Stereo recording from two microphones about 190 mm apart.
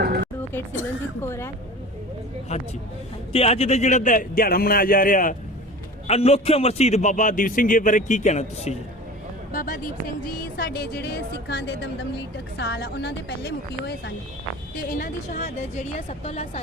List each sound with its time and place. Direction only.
0.0 s music: 55° right (ahead or behind)
1.2 s a woman's voice: 15° left (ahead or behind)
2.5 s a man's voice: 35° left (ahead or behind)
6.1 s a man's voice: 35° left (ahead or behind)
9.5 s a woman's voice: 45° left (ahead or behind)
14.8 s speech: 50° left (ahead or behind)
16.0 s a man's voice: 40° left (ahead or behind)